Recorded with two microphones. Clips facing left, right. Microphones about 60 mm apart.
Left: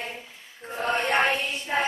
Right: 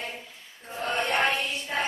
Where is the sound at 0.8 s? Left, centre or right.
Left.